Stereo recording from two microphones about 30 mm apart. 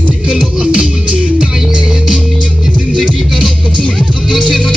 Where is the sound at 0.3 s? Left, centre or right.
Right.